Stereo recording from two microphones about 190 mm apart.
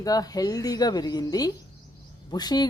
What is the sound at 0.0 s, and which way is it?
A woman's voice, 20° left (ahead or behind).